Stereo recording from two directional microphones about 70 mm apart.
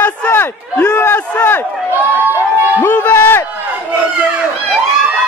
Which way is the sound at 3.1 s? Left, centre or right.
Left.